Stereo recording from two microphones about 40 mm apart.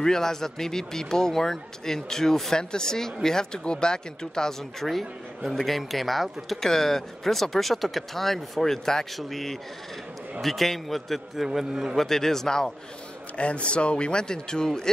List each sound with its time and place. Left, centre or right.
0.0 s speech: centre
6.6 s a man's voice: centre
11.3 s a man's voice: centre
12.0 s speech: centre
13.4 s speech: left